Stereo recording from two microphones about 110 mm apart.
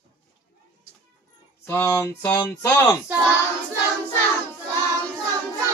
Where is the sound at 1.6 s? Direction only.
20° left (ahead or behind).